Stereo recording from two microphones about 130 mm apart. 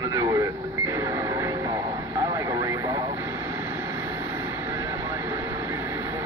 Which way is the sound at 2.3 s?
25° right (ahead or behind).